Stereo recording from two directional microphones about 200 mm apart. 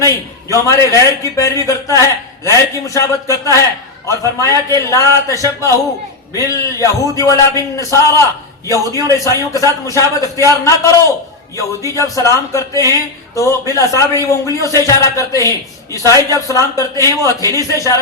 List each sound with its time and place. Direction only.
0.5 s a man's voice: 15° left (ahead or behind)